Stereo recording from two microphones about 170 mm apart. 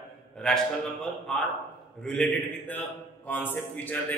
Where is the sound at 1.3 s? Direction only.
5° left (ahead or behind).